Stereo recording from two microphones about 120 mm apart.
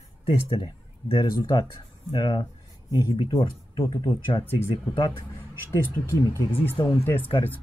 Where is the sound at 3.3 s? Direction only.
25° left (ahead or behind); by 4.5 s 45° left (ahead or behind).